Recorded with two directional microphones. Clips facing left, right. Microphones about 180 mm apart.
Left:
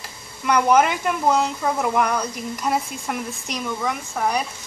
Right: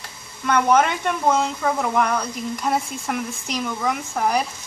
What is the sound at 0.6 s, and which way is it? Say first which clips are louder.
Speech: even; 5° left (ahead or behind).